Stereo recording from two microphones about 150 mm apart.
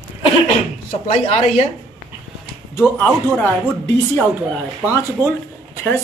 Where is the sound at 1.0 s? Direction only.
45° left (ahead or behind).